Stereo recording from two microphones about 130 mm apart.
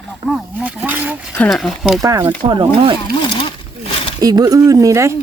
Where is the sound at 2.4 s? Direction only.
40° right (ahead or behind).